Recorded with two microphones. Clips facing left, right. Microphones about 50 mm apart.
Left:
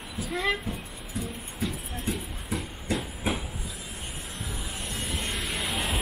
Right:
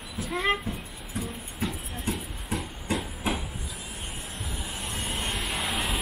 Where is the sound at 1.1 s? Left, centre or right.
Right.